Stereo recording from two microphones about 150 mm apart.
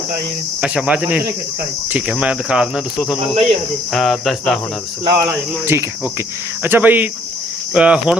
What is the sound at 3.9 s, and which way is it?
Speech, centre (ahead or behind).